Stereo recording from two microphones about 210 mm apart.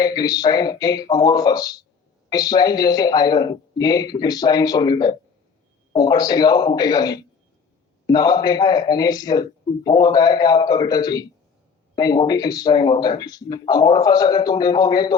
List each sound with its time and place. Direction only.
0.0 s a man's voice: 20° left (ahead or behind)